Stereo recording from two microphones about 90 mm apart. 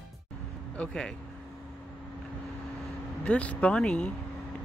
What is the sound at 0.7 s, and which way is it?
Speech, 5° left (ahead or behind).